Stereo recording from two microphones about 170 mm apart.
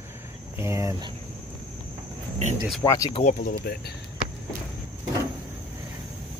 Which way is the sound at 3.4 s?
65° left (ahead or behind).